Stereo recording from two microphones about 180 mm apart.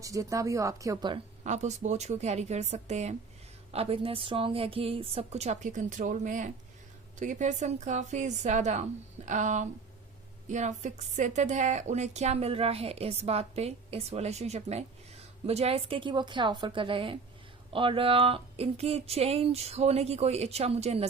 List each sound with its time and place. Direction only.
0.0 s speech: 20° right (ahead or behind)
1.5 s a woman's voice: 40° right (ahead or behind)